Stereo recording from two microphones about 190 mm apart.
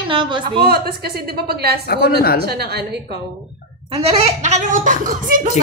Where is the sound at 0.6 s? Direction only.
55° right (ahead or behind).